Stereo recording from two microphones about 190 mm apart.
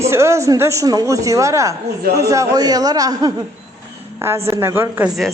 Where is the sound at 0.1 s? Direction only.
15° right (ahead or behind).